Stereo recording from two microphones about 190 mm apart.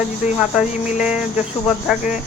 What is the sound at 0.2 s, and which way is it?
Speech, 5° right (ahead or behind).